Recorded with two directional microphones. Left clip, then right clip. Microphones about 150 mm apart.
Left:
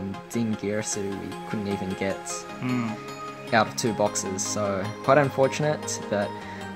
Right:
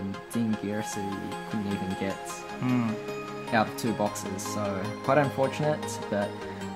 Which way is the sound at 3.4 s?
40° left (ahead or behind).